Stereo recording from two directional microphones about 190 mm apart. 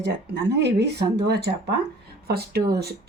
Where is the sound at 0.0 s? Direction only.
60° right (ahead or behind).